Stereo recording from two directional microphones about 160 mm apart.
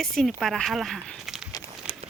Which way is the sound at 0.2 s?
Centre (ahead or behind).